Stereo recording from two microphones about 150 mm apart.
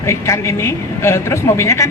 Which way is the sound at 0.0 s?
20° left (ahead or behind).